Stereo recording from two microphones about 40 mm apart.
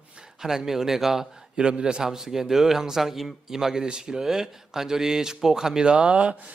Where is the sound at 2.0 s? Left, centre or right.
Centre; by 6.5 s right.